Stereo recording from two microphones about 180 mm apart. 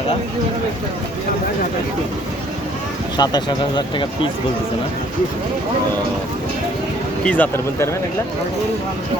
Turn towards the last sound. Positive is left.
turn(degrees=10)  # may be behind; listen again after turning